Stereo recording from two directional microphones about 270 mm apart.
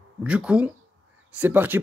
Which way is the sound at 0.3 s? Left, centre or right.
Centre.